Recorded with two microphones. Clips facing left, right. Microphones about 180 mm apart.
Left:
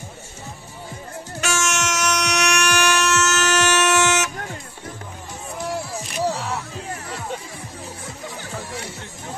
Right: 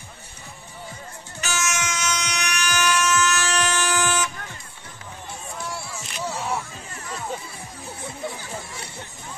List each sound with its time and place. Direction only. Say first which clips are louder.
1.4 s music: left 4 dB; 75° left (ahead or behind)
5.7 s music: left 6 dB; 40° left (ahead or behind)